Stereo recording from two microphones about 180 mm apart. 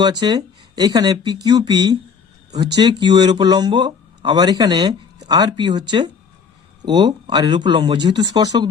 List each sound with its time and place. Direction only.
0.0 s speech: 25° right (ahead or behind)
3.0 s speech: 25° right (ahead or behind)